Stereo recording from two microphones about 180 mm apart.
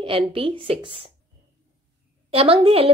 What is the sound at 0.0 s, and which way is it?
A woman's voice, 30° right (ahead or behind).